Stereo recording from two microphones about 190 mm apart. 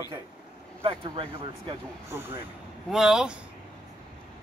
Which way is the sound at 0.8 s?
30° right (ahead or behind).